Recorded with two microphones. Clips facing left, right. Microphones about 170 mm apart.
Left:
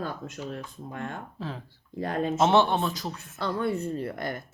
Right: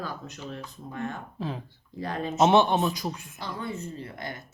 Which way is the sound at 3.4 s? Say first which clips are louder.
Left 7 dB; 60° left (ahead or behind).